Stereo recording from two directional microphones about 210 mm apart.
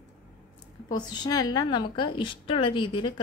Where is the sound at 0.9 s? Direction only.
20° left (ahead or behind).